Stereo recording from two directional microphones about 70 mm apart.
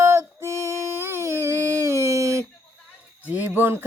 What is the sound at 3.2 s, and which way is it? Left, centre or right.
Speech, right.